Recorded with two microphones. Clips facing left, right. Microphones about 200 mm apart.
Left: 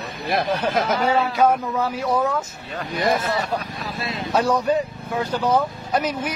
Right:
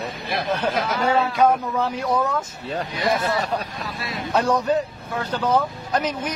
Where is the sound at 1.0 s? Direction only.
5° left (ahead or behind).